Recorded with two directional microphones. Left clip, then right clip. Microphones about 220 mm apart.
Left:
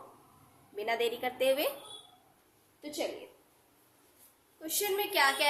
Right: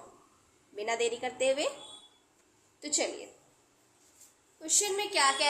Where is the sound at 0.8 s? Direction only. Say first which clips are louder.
Right 1 dB; 5° right (ahead or behind).